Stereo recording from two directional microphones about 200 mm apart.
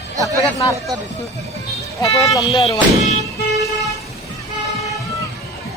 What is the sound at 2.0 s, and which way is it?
Speech, 15° left (ahead or behind).